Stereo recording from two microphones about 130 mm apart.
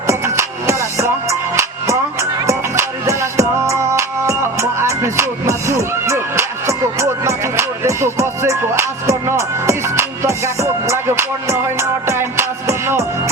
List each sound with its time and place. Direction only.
0.1 s music: 20° right (ahead or behind)
2.5 s music: 20° right (ahead or behind)